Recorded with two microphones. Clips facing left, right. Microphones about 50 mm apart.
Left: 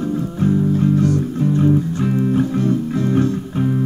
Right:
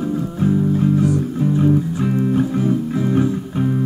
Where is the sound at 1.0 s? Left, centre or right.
Centre.